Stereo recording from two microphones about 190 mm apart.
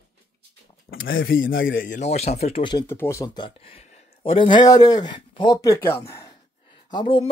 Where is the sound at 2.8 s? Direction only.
10° left (ahead or behind).